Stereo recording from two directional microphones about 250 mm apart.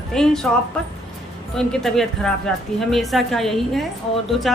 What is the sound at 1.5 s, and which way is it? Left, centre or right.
A woman's voice, centre.